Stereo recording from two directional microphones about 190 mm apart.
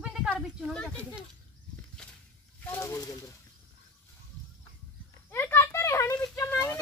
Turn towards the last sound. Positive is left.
turn(degrees=10)  # may be behind; listen again after turning